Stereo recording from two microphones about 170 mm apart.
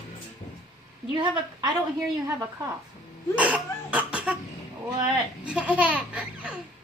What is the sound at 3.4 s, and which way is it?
Cough, 10° right (ahead or behind).